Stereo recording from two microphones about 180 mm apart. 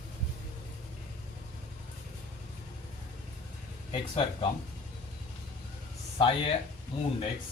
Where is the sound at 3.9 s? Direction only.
30° left (ahead or behind).